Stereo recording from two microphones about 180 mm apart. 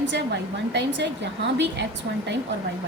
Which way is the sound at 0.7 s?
75° right (ahead or behind).